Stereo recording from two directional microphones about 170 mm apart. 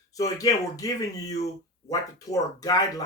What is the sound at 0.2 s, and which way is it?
Speech, 20° left (ahead or behind).